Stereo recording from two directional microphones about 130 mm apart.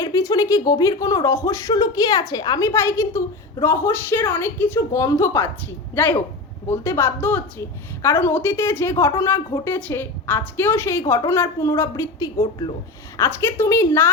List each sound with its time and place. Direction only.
0.0 s a woman's voice: 25° left (ahead or behind)